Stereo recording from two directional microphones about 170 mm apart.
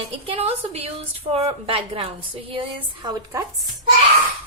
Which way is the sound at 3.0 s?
20° right (ahead or behind).